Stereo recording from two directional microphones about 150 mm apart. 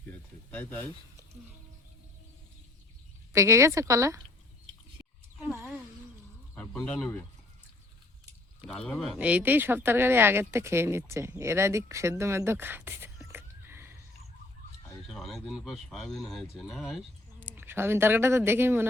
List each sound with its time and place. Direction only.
0.1 s speech: 10° left (ahead or behind)
3.3 s speech: 20° right (ahead or behind)
5.5 s a sound: 15° right (ahead or behind)
6.5 s speech: 10° left (ahead or behind)
8.6 s speech: 5° left (ahead or behind)
9.1 s speech: 10° right (ahead or behind)
13.3 s a sound: 15° right (ahead or behind)
15.0 s speech: centre (ahead or behind)
17.5 s speech: 15° right (ahead or behind)